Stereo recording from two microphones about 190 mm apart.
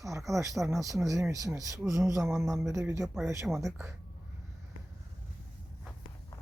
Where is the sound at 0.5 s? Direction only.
Centre (ahead or behind).